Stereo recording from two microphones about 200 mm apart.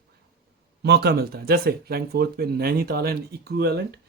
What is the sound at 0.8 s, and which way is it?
Speech, 55° right (ahead or behind).